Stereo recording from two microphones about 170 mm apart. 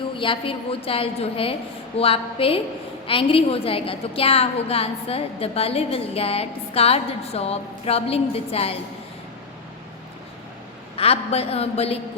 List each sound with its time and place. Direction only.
0.2 s a woman's voice: 30° left (ahead or behind)
10.9 s a woman's voice: 35° left (ahead or behind)